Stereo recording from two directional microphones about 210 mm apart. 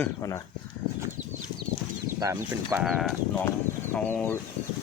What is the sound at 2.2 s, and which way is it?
Speech, 15° right (ahead or behind).